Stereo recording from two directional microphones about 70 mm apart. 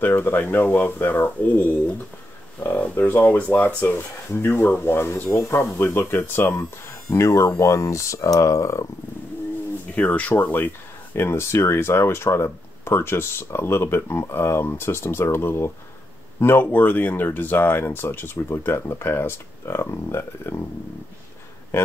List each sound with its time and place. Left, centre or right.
0.0 s speech: left
7.1 s speech: left
9.9 s speech: left